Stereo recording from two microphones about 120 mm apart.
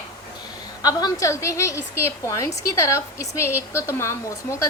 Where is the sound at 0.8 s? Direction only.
35° left (ahead or behind).